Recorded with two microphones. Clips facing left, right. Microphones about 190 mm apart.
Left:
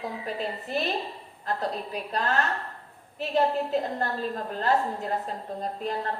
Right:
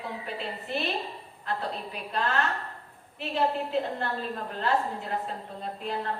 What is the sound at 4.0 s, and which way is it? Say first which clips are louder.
Speech: left 3 dB; 40° left (ahead or behind).